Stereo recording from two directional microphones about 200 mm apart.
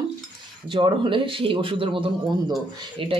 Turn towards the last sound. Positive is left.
turn(degrees=-25)  # may be behind; listen again after turning